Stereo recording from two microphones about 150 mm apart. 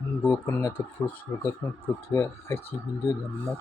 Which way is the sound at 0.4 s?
15° left (ahead or behind).